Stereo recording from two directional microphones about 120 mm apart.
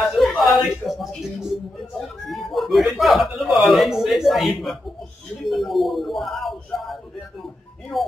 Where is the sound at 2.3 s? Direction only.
Centre (ahead or behind).